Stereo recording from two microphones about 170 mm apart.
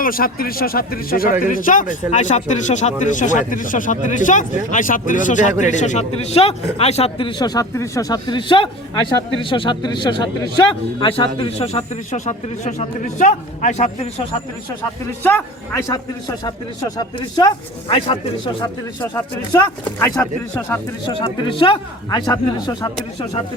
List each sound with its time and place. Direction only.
0.0 s speech: 60° left (ahead or behind)
15.2 s a man's voice: 15° left (ahead or behind)
20.6 s a man's voice: 10° left (ahead or behind)
21.1 s speech: 30° left (ahead or behind)